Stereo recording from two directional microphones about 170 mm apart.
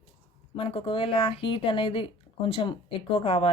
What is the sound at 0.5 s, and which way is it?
Speech, 35° left (ahead or behind).